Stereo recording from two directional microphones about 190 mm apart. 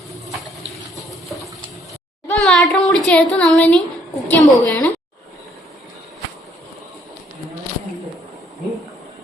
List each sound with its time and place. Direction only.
2.2 s a woman's voice: 5° left (ahead or behind)